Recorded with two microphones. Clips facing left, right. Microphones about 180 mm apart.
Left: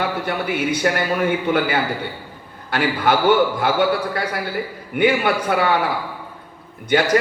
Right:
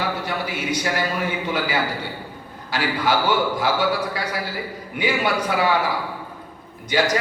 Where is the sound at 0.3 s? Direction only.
55° left (ahead or behind).